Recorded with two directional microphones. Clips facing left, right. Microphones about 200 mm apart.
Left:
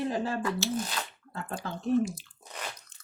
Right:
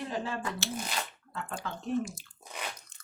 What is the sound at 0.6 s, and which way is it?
Speech, 55° right (ahead or behind).